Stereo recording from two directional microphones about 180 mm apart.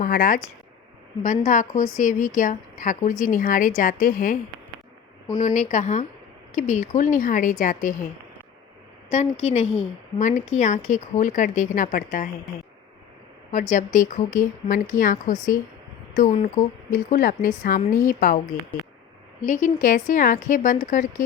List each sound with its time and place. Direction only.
0.0 s speech: 50° left (ahead or behind)
5.4 s speech: 45° left (ahead or behind)
9.1 s speech: 35° left (ahead or behind)
13.5 s speech: 45° left (ahead or behind)
19.4 s speech: 45° left (ahead or behind)